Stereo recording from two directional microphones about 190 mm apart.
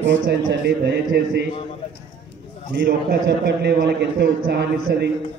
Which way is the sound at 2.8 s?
55° right (ahead or behind).